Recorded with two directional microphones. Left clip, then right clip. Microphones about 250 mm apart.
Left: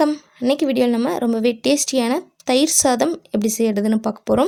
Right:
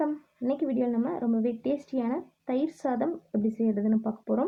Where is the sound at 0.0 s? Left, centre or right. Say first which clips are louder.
Left 11 dB; left.